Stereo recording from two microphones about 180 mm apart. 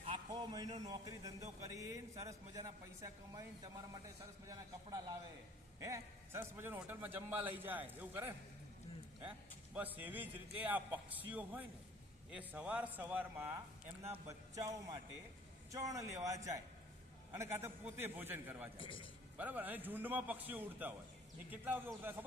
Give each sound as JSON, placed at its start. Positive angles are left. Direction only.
{"t": 0.3, "sound": "a man's voice", "side_deg": -20}
{"t": 9.7, "sound": "a man's voice", "side_deg": -10}
{"t": 18.8, "sound": "a man's voice", "side_deg": 30}
{"t": 19.4, "sound": "a man's voice", "side_deg": -10}